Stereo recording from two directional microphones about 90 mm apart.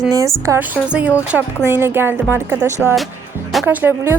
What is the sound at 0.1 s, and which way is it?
Speech, 35° right (ahead or behind).